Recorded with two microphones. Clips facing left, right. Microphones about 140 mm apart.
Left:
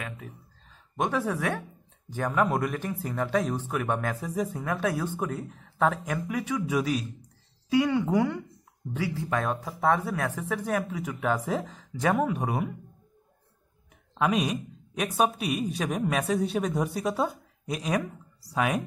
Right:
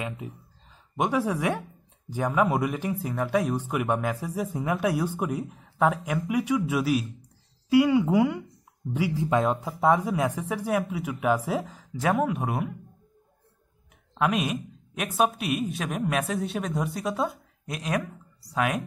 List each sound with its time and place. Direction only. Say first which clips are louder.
0.9 s speech: right 2 dB; 10° right (ahead or behind)
14.1 s speech: even; centre (ahead or behind)